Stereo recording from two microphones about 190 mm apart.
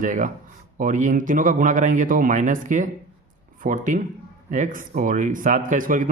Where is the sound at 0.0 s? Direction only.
45° right (ahead or behind).